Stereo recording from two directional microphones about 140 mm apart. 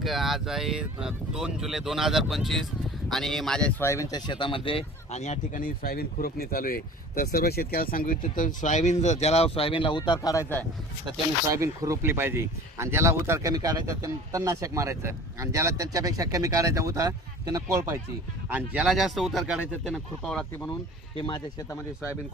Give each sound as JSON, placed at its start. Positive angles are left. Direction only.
{"t": 0.0, "sound": "speech", "side_deg": 0}
{"t": 3.8, "sound": "speech", "side_deg": 20}
{"t": 4.3, "sound": "speech", "side_deg": 35}
{"t": 5.2, "sound": "speech", "side_deg": 65}
{"t": 11.5, "sound": "speech", "side_deg": -20}
{"t": 21.2, "sound": "speech", "side_deg": 35}